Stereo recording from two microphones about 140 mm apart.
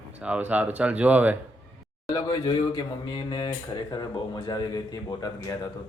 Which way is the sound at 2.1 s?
30° left (ahead or behind).